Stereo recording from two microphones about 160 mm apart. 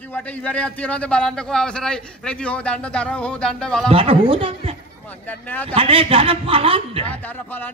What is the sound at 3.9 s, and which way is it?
Speech, 35° right (ahead or behind).